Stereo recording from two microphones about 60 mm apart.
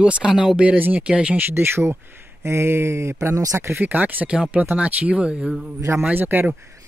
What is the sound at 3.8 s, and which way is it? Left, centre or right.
Speech, right.